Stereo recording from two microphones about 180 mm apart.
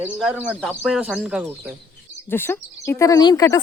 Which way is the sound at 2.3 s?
10° left (ahead or behind).